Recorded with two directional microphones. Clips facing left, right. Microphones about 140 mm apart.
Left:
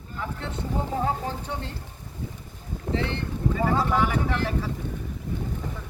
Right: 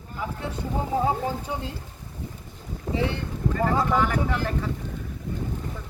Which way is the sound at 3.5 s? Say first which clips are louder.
Right 1 dB; 5° left (ahead or behind).